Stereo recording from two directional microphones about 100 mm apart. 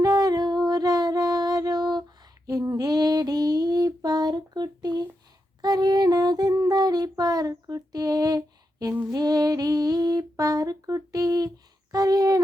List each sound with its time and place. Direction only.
0.0 s female singing: 40° right (ahead or behind)
2.5 s child singing: 40° right (ahead or behind)
5.6 s a sound: 40° right (ahead or behind)
9.1 s female singing: 40° right (ahead or behind)